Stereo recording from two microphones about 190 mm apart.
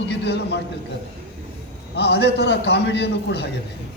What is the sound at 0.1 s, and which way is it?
Speech, 65° left (ahead or behind).